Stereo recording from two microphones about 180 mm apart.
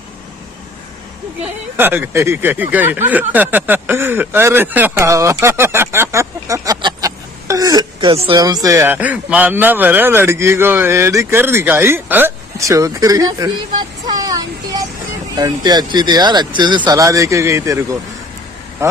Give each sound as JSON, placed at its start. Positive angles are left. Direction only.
{"t": 1.4, "sound": "speech", "side_deg": -10}
{"t": 18.8, "sound": "speech", "side_deg": -15}